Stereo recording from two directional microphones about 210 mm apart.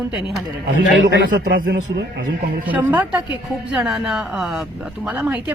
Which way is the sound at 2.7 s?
5° right (ahead or behind).